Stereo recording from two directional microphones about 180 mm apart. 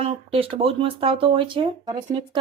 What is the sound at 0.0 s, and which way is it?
Speech, 30° right (ahead or behind).